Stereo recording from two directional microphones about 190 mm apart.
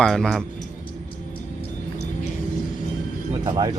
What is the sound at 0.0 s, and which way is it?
Speech, centre (ahead or behind).